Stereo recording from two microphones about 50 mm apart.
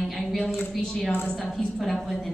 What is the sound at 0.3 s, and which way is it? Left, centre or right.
A woman's voice, centre.